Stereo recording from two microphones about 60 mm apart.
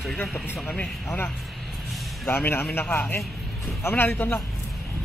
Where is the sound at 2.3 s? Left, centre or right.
Left.